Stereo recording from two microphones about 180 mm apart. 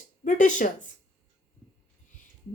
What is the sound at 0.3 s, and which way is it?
Speech, 45° left (ahead or behind).